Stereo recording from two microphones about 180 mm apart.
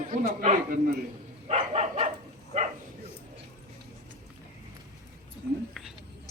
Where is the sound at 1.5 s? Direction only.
40° right (ahead or behind).